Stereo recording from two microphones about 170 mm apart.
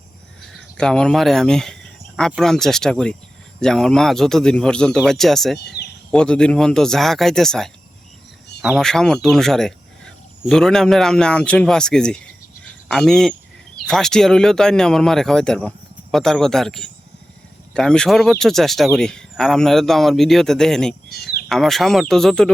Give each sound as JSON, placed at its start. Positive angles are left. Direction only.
{"t": 0.8, "sound": "speech", "side_deg": 5}
{"t": 5.5, "sound": "speech", "side_deg": 75}
{"t": 6.1, "sound": "speech", "side_deg": 5}
{"t": 21.1, "sound": "speech", "side_deg": 70}
{"t": 21.5, "sound": "speech", "side_deg": 0}